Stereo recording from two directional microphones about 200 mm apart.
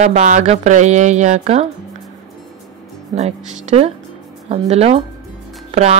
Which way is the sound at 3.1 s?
35° right (ahead or behind).